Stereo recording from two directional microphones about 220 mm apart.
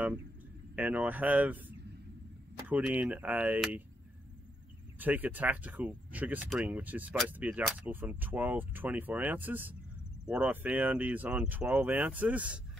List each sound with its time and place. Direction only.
0.7 s speech: 5° right (ahead or behind)
4.9 s speech: 10° right (ahead or behind)